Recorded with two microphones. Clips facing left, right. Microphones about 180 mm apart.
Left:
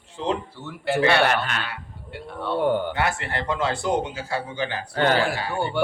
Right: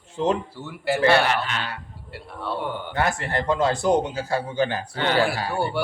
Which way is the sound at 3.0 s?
40° right (ahead or behind).